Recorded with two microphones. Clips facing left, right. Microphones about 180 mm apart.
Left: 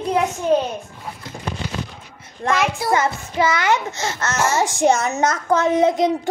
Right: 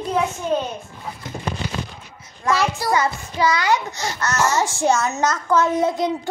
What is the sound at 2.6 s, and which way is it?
A child's voice, 25° left (ahead or behind).